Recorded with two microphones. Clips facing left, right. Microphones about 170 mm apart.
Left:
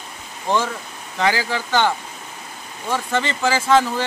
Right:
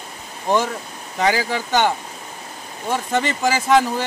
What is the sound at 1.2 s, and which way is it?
Speech, 15° right (ahead or behind).